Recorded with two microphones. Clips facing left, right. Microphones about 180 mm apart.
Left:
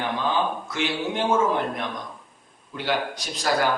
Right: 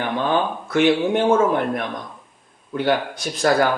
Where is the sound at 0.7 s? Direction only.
55° right (ahead or behind).